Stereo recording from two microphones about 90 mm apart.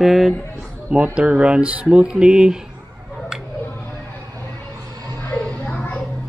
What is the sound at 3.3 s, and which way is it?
Tick-tock, 5° right (ahead or behind).